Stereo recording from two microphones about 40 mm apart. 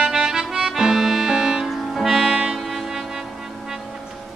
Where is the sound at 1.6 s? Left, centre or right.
Centre.